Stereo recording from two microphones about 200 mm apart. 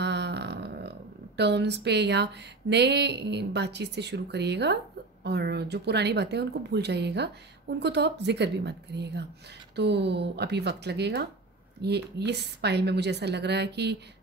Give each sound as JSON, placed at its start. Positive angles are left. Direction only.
{"t": 0.0, "sound": "a woman's voice", "side_deg": -60}